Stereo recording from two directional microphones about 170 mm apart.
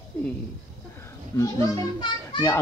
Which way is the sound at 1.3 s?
20° left (ahead or behind).